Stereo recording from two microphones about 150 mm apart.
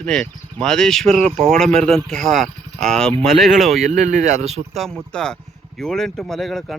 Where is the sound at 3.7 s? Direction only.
55° right (ahead or behind).